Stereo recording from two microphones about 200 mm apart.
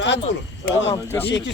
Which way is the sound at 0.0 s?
60° left (ahead or behind).